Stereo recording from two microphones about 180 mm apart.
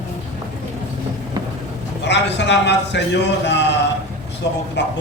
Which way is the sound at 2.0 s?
75° left (ahead or behind).